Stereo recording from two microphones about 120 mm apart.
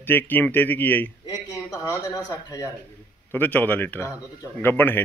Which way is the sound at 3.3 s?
15° left (ahead or behind).